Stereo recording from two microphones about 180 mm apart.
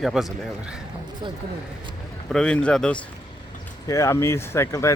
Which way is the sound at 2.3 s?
5° left (ahead or behind).